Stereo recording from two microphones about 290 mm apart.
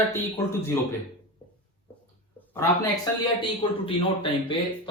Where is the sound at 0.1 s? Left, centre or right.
Centre.